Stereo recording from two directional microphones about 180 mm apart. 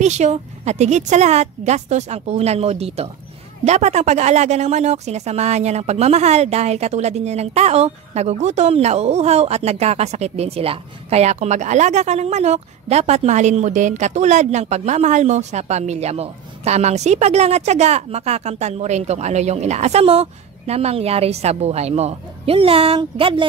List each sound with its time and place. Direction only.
0.0 s speech: 40° right (ahead or behind)